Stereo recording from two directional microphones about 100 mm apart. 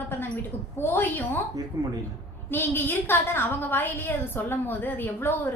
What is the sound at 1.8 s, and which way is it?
Speech, 35° right (ahead or behind).